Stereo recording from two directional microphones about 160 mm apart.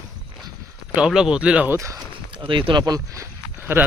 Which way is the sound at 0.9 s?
5° right (ahead or behind).